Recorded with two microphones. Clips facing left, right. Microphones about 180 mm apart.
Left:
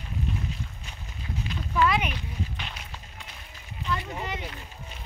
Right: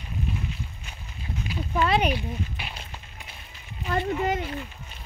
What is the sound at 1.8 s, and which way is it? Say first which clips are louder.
Speech: right 2 dB; 30° right (ahead or behind).